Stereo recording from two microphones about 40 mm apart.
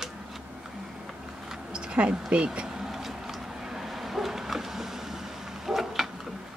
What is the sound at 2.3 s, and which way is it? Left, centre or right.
Speech, right.